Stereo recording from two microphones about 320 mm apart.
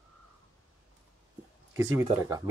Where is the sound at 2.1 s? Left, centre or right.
Centre.